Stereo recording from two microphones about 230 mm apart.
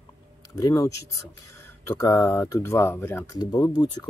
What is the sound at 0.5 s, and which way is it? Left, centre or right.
Speech, centre.